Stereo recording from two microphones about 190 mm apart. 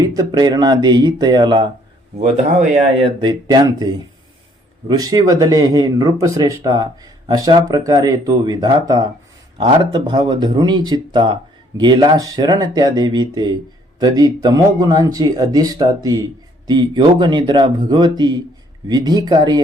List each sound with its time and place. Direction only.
0.0 s speech: 20° right (ahead or behind)
3.0 s speech: 25° right (ahead or behind)
4.9 s speech: 20° right (ahead or behind)